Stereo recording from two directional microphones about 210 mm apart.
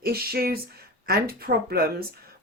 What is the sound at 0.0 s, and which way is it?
A woman's voice, 45° right (ahead or behind).